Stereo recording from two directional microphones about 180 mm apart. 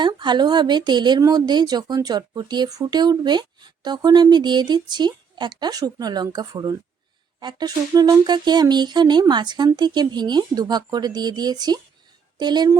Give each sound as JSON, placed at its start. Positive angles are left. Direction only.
{"t": 0.0, "sound": "speech", "side_deg": -25}